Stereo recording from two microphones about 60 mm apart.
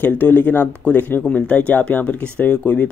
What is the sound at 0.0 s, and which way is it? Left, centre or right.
Speech, left.